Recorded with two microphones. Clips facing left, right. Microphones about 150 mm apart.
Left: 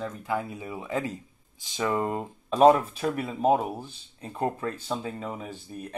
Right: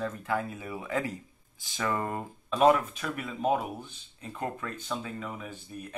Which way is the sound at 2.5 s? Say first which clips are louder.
Left 4 dB; 35° left (ahead or behind).